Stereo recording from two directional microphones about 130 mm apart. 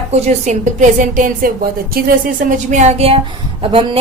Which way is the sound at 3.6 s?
40° right (ahead or behind).